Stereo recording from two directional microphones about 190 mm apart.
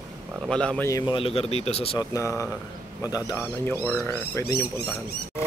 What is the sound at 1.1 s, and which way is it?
Speech, 30° left (ahead or behind).